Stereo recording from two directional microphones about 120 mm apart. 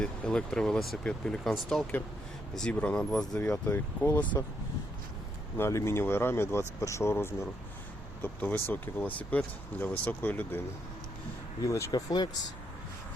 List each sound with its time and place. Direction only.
0.0 s speech: 5° left (ahead or behind)
5.5 s speech: 20° left (ahead or behind)
11.6 s speech: 25° left (ahead or behind)